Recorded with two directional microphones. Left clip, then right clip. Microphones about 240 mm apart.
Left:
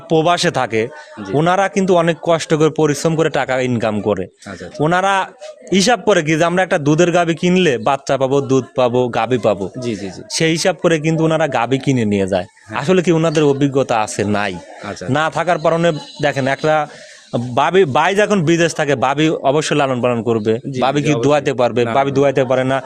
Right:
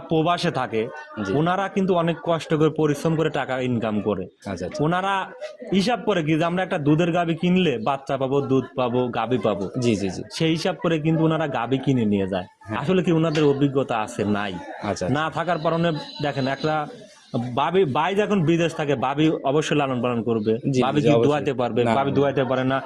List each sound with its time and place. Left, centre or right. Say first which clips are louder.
0.1 s speech: left 8 dB; left